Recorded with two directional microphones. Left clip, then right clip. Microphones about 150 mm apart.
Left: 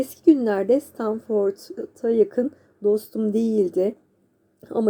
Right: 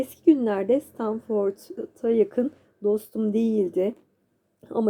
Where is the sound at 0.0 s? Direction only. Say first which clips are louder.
Left 2 dB; centre (ahead or behind).